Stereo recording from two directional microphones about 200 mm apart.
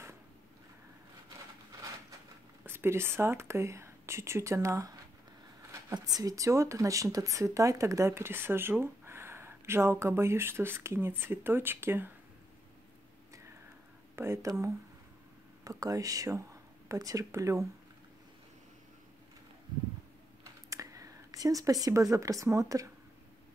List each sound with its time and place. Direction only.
2.6 s speech: 10° right (ahead or behind)
14.1 s speech: 15° right (ahead or behind)
20.7 s speech: 15° right (ahead or behind)